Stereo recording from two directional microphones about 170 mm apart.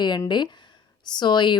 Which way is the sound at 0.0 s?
25° left (ahead or behind).